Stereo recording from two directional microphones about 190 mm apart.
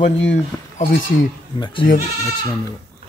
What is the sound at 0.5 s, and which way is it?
Speech, 15° left (ahead or behind).